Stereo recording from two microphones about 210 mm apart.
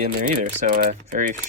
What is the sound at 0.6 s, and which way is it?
Speech, 40° right (ahead or behind).